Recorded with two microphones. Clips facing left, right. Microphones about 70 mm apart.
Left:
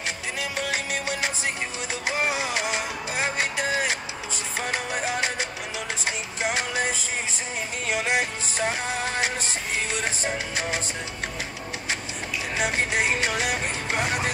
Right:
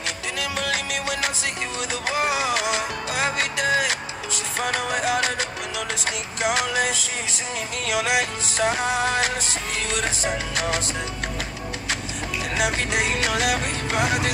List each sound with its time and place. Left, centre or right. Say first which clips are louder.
0.4 s music: right 3 dB; right
2.1 s music: right 4 dB; right
10.5 s music: right 3 dB; right
12.7 s music: even; left
13.2 s music: right 3 dB; right